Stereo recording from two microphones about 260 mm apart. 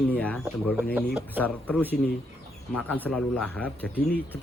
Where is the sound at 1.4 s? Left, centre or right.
Centre.